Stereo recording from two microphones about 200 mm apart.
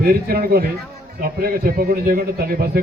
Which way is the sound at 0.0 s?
50° right (ahead or behind).